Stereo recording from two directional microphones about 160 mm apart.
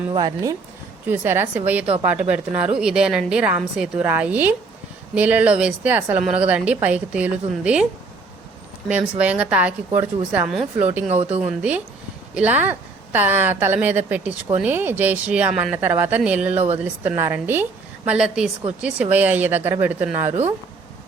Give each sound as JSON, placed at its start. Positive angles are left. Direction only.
{"t": 0.1, "sound": "speech", "side_deg": -25}
{"t": 1.0, "sound": "a woman's voice", "side_deg": -15}
{"t": 8.9, "sound": "a woman's voice", "side_deg": -10}
{"t": 12.3, "sound": "a woman's voice", "side_deg": -10}
{"t": 16.5, "sound": "speech", "side_deg": -40}
{"t": 16.7, "sound": "a woman's voice", "side_deg": -10}